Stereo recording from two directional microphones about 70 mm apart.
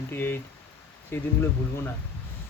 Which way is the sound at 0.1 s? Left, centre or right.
Left.